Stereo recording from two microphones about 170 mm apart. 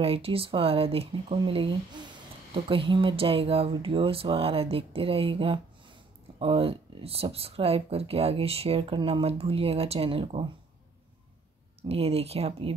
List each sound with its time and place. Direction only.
0.0 s speech: 35° right (ahead or behind)
11.9 s speech: 35° right (ahead or behind)